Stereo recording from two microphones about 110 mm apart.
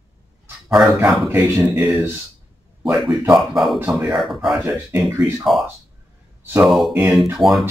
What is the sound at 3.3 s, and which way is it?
Speech, centre (ahead or behind).